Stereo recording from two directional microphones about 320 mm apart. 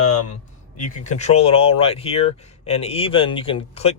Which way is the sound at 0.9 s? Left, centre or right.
Left.